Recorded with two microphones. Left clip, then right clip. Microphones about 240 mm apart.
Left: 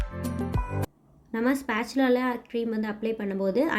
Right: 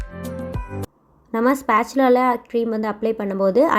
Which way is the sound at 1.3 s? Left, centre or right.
Centre.